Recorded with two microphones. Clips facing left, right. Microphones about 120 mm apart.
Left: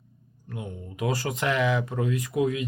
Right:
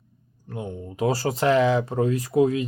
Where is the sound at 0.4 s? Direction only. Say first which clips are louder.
Right 4 dB; 30° right (ahead or behind).